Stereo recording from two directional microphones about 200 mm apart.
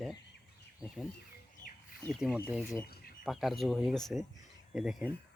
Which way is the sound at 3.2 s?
Centre (ahead or behind).